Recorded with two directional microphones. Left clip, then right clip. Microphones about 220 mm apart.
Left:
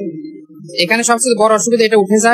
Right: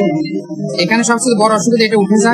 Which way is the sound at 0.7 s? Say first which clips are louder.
Left 1 dB; 40° left (ahead or behind).